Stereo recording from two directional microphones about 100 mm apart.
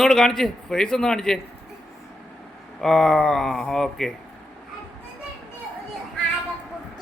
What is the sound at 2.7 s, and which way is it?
A man's voice, 5° left (ahead or behind).